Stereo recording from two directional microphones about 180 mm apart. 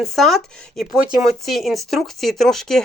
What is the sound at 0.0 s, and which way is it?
Speech, centre (ahead or behind).